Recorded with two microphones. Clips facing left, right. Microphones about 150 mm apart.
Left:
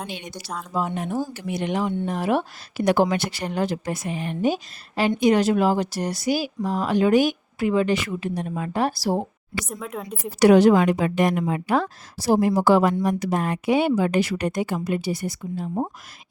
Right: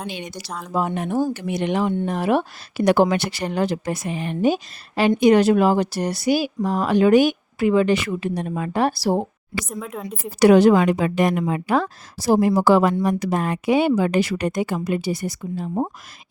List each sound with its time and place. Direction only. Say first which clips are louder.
0.1 s speech: right 3 dB; 90° right
0.6 s speech: right 3 dB; 60° right (ahead or behind)
9.6 s speech: right 2 dB; centre (ahead or behind)
10.4 s speech: right 1 dB; 90° right